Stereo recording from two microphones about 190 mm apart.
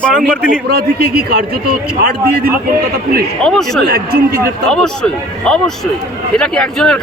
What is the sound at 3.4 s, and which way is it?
Speech, 5° left (ahead or behind).